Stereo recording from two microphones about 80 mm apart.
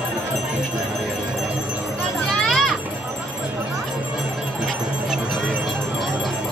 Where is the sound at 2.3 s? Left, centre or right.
Centre.